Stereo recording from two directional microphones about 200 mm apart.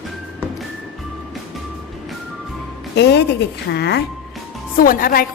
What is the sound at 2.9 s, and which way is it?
Speech, 55° left (ahead or behind).